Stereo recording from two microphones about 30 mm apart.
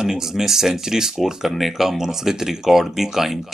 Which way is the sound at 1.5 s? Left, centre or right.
Centre.